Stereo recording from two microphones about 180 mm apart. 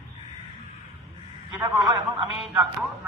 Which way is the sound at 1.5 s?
25° right (ahead or behind).